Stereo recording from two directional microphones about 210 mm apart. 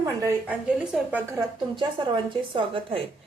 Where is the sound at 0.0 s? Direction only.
15° right (ahead or behind).